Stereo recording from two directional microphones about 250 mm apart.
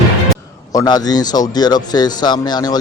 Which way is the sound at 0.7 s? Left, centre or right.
Centre.